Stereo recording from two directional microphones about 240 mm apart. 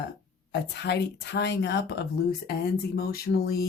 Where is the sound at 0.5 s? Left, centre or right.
Left.